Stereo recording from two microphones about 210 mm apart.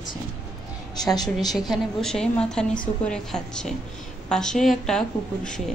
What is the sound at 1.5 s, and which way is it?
A woman's voice, centre (ahead or behind).